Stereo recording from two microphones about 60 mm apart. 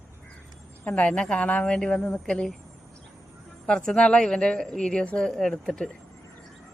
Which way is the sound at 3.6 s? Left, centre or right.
Centre.